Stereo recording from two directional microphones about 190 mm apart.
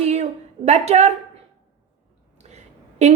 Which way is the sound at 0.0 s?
35° right (ahead or behind).